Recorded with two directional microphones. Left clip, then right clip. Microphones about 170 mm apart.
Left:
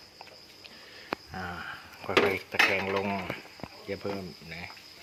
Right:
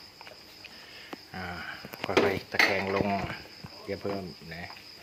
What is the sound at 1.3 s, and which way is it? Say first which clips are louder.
Speech: even; 15° left (ahead or behind).